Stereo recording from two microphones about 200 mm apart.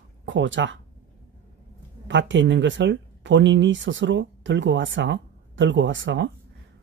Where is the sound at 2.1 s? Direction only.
65° right (ahead or behind).